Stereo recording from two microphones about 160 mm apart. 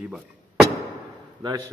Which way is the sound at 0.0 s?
5° right (ahead or behind).